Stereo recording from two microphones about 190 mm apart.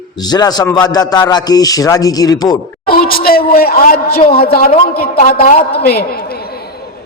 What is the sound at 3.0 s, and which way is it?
A man's voice, 50° left (ahead or behind).